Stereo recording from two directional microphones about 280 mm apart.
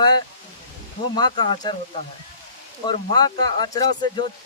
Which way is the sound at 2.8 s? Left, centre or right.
Centre.